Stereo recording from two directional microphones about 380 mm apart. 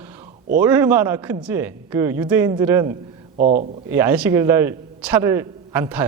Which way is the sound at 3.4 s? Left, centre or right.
Right.